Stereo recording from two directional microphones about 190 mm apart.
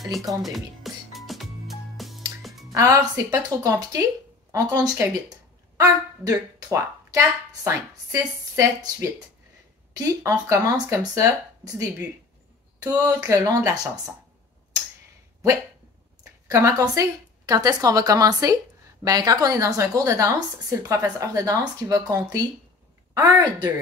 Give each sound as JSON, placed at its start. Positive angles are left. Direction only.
{"t": 0.3, "sound": "music", "side_deg": 0}
{"t": 2.7, "sound": "speech", "side_deg": -15}
{"t": 16.4, "sound": "a woman's voice", "side_deg": -15}